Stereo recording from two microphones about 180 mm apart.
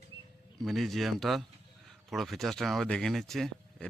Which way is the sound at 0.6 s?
Centre (ahead or behind).